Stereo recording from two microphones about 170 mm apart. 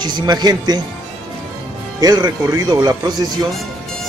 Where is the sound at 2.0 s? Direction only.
25° right (ahead or behind).